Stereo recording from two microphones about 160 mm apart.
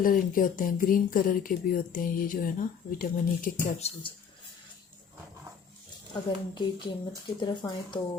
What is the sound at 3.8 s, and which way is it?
Speech, 40° left (ahead or behind).